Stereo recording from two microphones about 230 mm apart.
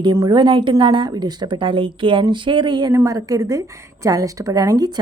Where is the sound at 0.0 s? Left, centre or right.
Centre.